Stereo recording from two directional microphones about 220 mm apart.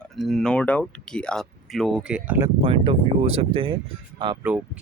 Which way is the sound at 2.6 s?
25° right (ahead or behind).